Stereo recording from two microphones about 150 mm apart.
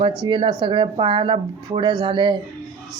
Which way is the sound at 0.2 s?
35° right (ahead or behind).